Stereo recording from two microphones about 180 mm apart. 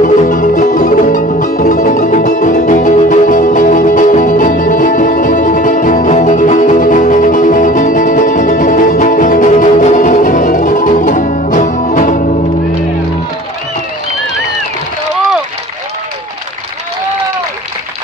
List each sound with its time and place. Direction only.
0.0 s music: 45° left (ahead or behind)